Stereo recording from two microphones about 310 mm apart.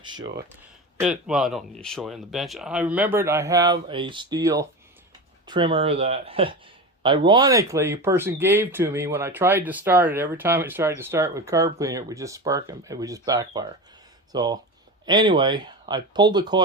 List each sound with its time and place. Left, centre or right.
0.0 s speech: centre
0.9 s speech: centre